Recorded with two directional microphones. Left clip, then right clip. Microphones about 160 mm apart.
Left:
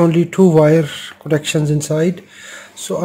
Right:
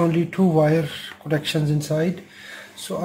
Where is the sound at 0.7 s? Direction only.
50° left (ahead or behind).